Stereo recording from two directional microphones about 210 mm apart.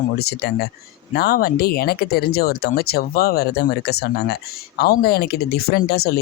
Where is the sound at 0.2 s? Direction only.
50° left (ahead or behind).